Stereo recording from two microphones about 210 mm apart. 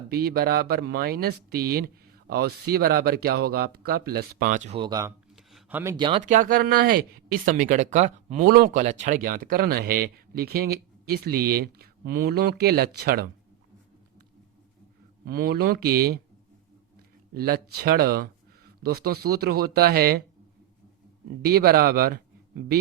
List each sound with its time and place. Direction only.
0.1 s speech: 45° right (ahead or behind)
4.8 s speech: 15° right (ahead or behind)
5.5 s a sound: 5° right (ahead or behind)
6.0 s speech: 25° right (ahead or behind)
6.2 s speech: 40° right (ahead or behind)
15.3 s speech: 45° right (ahead or behind)
17.3 s speech: 45° right (ahead or behind)
21.4 s speech: 45° right (ahead or behind)